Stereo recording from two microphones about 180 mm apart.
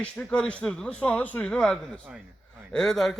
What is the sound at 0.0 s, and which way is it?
Speech, 5° left (ahead or behind).